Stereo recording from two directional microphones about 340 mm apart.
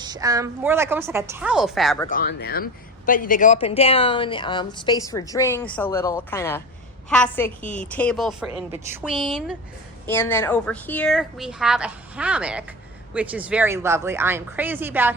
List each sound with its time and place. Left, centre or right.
0.0 s a woman's voice: centre
2.0 s a woman's voice: left; by 15.1 s centre